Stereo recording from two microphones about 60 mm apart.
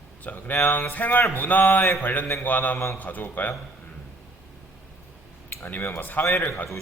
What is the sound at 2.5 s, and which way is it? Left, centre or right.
Speech, left.